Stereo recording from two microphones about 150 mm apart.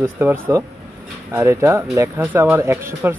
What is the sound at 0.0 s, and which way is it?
Speech, 15° right (ahead or behind).